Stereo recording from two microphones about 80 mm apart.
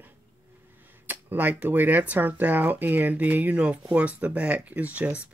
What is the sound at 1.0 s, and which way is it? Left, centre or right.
Speech, right.